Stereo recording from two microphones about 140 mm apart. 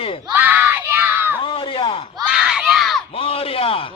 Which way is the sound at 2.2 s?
5° right (ahead or behind).